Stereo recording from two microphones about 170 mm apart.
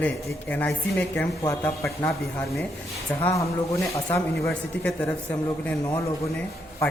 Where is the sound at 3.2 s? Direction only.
20° left (ahead or behind).